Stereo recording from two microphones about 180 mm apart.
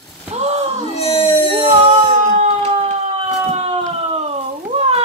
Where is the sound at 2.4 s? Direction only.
35° right (ahead or behind).